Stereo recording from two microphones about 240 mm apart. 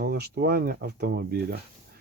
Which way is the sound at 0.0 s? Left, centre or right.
Right.